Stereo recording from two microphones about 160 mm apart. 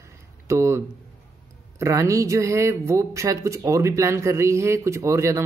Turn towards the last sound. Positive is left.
turn(degrees=-20)  # may be behind; listen again after turning